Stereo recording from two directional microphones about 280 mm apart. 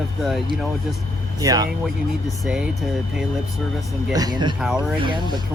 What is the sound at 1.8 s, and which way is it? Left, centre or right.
Speech, centre.